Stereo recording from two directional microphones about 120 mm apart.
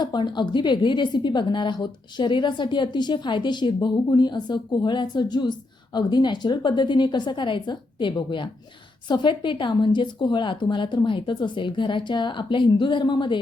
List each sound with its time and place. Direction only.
0.0 s a woman's voice: 40° left (ahead or behind)